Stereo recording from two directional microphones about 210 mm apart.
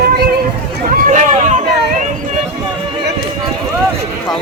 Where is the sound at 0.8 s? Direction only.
40° right (ahead or behind).